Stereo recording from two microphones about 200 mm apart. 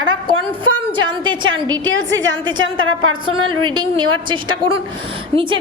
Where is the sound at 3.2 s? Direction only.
25° right (ahead or behind).